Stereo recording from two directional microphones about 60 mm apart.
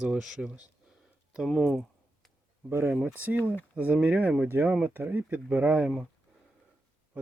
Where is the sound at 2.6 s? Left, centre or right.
Right.